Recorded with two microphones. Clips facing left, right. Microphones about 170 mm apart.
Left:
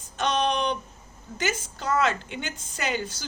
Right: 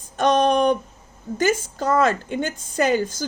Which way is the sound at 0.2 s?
50° right (ahead or behind).